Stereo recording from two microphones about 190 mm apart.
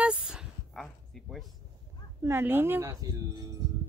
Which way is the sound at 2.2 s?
10° right (ahead or behind).